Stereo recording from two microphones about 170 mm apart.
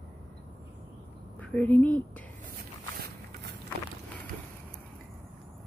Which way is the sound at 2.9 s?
65° right (ahead or behind).